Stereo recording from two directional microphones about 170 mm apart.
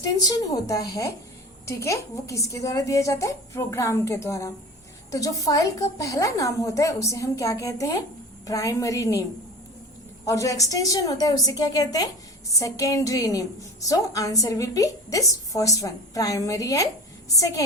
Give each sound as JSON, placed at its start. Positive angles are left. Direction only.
{"t": 0.0, "sound": "a woman's voice", "side_deg": 20}
{"t": 10.2, "sound": "a woman's voice", "side_deg": 20}